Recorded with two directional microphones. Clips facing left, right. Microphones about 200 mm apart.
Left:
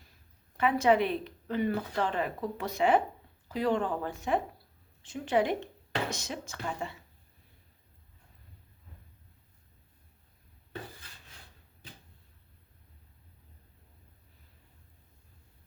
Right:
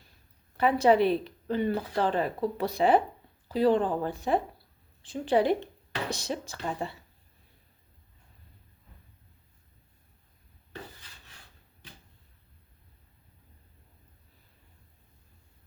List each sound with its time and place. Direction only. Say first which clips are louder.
0.5 s a woman's voice: right 3 dB; 35° right (ahead or behind)